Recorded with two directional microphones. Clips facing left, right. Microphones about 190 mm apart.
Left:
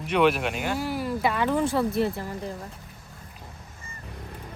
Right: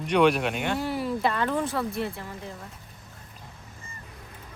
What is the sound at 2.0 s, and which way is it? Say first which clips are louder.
Speech: left 6 dB; 35° left (ahead or behind).